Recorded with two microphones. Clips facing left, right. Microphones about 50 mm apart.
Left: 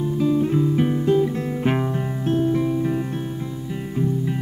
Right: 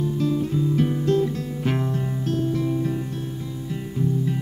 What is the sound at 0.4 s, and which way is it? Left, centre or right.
Music, left.